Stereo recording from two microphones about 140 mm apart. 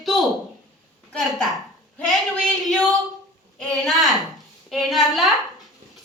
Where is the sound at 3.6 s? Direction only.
Centre (ahead or behind).